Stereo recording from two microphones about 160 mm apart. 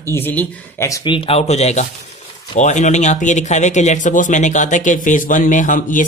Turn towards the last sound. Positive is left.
turn(degrees=55)  # may be behind; listen again after turning